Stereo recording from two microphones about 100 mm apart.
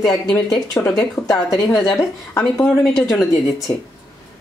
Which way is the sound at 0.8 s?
25° left (ahead or behind).